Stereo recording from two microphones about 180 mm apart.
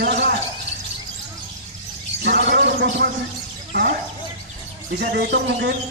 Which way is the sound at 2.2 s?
70° right (ahead or behind).